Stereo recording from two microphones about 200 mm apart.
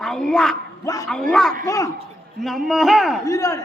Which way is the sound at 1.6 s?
15° left (ahead or behind).